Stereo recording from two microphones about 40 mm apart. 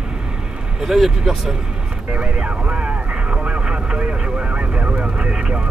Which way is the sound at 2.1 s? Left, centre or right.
Right.